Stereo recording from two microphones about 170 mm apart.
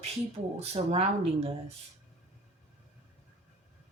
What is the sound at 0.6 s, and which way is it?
Speech, 35° right (ahead or behind).